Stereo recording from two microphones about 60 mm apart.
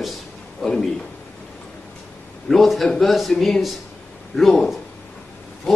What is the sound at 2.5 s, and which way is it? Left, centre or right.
A man's voice, centre.